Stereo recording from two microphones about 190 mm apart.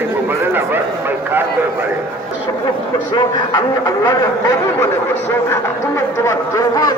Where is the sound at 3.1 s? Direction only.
25° left (ahead or behind).